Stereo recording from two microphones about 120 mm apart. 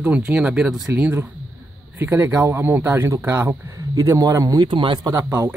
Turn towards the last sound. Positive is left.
turn(degrees=-25)  # may be behind; listen again after turning